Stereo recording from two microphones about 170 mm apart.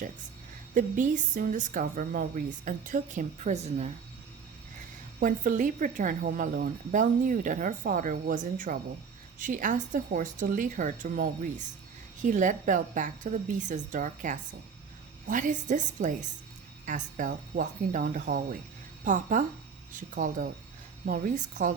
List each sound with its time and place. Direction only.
0.7 s speech: 50° right (ahead or behind)
5.2 s speech: 50° right (ahead or behind)